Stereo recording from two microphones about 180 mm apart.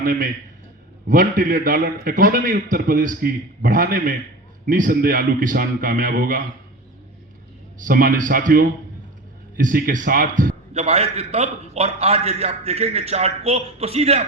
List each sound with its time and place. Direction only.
0.0 s a man's voice: 50° right (ahead or behind)
7.9 s a man's voice: 50° right (ahead or behind)
10.5 s a man's voice: 35° right (ahead or behind)